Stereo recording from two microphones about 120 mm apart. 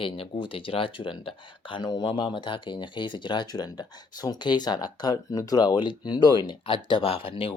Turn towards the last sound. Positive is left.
turn(degrees=50)  # may be behind; listen again after turning